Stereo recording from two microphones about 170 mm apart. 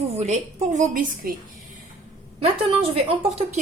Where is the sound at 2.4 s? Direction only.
35° right (ahead or behind).